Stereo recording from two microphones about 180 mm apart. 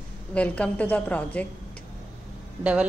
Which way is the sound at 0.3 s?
5° left (ahead or behind).